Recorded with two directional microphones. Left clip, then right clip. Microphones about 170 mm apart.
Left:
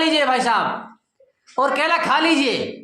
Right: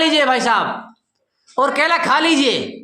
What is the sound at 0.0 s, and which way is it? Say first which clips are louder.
A woman's voice: right 3 dB; 25° right (ahead or behind).